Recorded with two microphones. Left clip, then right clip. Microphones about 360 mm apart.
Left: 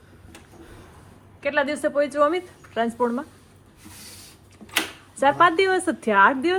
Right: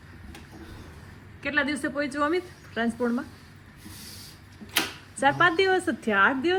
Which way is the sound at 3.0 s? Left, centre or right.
Left.